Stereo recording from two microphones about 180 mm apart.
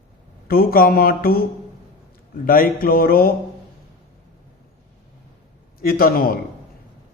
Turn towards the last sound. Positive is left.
turn(degrees=55)  # may be behind; listen again after turning